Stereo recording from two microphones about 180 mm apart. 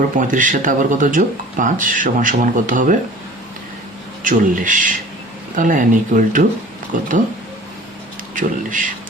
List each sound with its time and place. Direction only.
0.2 s speech: 45° right (ahead or behind)
4.2 s speech: 45° right (ahead or behind)
8.4 s speech: 45° right (ahead or behind)